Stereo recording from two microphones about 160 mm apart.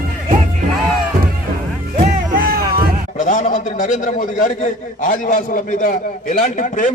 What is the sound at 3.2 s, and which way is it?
A man's voice, 50° left (ahead or behind).